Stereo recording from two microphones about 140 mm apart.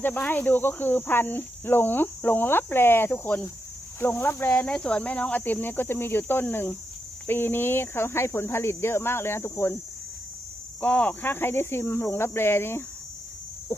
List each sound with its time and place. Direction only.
0.0 s speech: 15° left (ahead or behind)
10.8 s speech: 10° left (ahead or behind)